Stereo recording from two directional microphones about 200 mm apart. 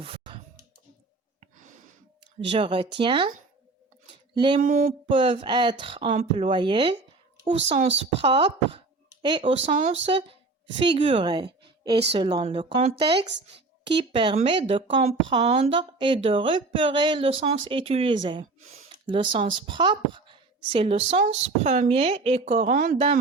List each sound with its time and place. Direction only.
0.0 s a sound: 30° right (ahead or behind)
2.5 s speech: 25° right (ahead or behind)
4.4 s speech: 25° right (ahead or behind)
4.7 s speech: 35° right (ahead or behind)